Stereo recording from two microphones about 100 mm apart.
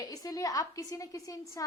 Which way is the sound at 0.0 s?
40° left (ahead or behind).